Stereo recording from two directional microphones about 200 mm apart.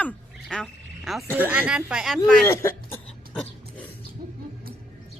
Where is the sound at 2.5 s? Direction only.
15° left (ahead or behind).